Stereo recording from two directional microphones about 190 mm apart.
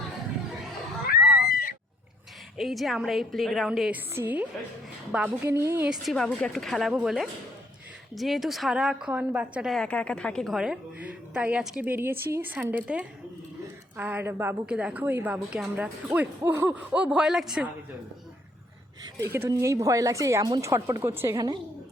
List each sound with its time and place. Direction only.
2.6 s a woman's voice: centre (ahead or behind)
19.2 s a woman's voice: 15° right (ahead or behind)